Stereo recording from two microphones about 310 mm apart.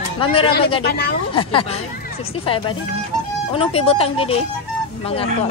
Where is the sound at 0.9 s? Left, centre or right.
Left.